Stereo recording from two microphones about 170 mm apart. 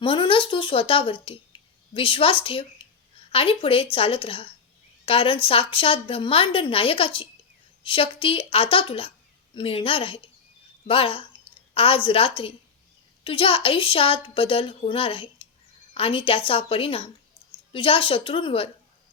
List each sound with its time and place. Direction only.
0.0 s a woman's voice: 30° left (ahead or behind)